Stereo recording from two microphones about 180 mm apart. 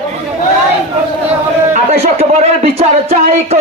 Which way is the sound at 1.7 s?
35° right (ahead or behind).